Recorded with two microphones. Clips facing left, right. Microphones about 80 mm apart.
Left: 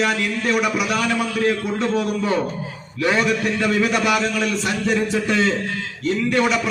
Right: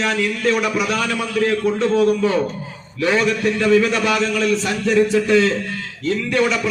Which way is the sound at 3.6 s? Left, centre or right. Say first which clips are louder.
Right 4 dB; centre.